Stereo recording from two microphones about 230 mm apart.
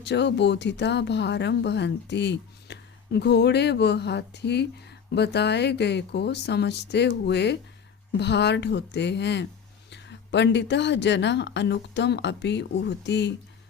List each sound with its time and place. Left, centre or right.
0.0 s speech: left